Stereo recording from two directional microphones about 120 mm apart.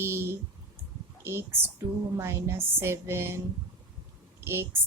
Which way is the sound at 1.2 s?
20° right (ahead or behind).